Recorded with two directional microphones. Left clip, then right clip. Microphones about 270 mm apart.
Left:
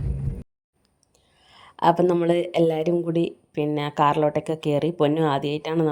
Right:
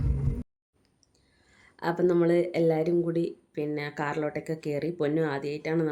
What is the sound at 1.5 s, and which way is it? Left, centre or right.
Speech, left.